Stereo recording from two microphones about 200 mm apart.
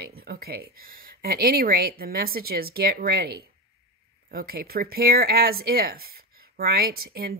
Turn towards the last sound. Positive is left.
turn(degrees=-50)  # may be behind; listen again after turning